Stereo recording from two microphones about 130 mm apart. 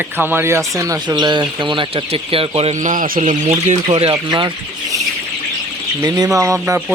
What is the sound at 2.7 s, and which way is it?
Speech, 80° right.